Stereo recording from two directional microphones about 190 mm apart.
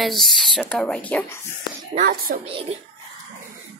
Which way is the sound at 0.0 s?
Centre (ahead or behind).